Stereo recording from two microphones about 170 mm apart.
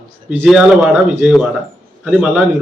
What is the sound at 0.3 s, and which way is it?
A man's voice, 5° right (ahead or behind).